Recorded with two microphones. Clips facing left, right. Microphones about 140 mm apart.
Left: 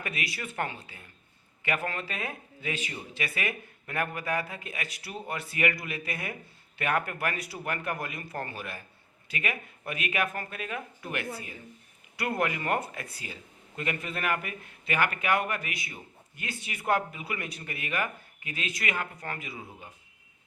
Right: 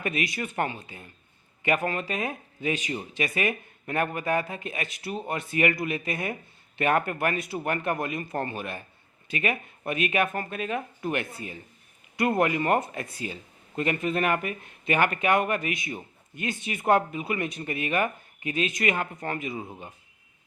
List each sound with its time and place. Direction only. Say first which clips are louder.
0.0 s speech: right 6 dB; 20° right (ahead or behind)